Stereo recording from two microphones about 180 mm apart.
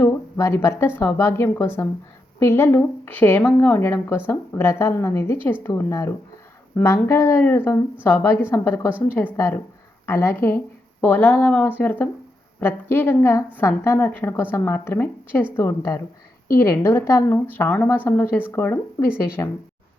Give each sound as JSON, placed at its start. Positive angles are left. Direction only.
{"t": 0.0, "sound": "speech", "side_deg": 15}